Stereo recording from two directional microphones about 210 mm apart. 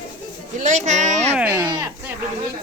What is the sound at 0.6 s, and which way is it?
Speech, 35° right (ahead or behind).